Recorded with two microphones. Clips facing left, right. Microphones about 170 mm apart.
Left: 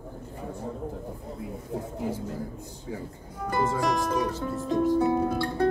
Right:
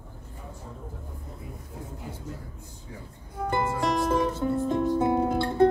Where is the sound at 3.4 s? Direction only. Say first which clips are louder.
Left 1 dB; 25° right (ahead or behind).